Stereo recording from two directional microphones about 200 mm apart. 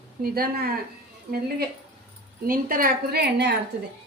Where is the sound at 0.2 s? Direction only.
50° right (ahead or behind).